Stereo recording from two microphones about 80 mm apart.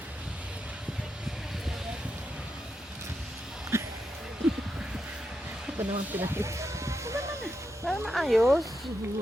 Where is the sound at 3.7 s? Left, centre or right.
Right.